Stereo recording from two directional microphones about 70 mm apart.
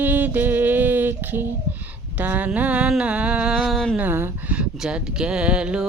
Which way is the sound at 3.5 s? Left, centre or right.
Centre.